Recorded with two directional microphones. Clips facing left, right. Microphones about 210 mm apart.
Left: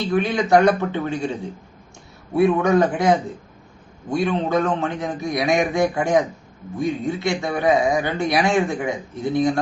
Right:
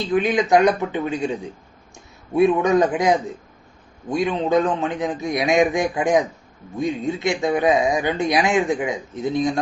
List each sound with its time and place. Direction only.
0.1 s speech: 20° right (ahead or behind)
2.3 s speech: 20° right (ahead or behind)